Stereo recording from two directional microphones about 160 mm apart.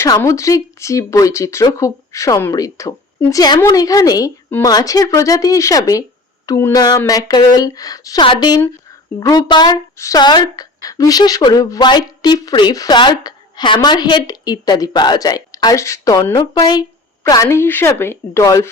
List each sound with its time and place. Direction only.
0.0 s a woman's voice: 20° left (ahead or behind)
16.3 s a woman's voice: 30° left (ahead or behind)